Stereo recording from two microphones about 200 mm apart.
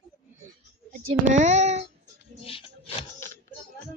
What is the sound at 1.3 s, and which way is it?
Speech, 35° right (ahead or behind).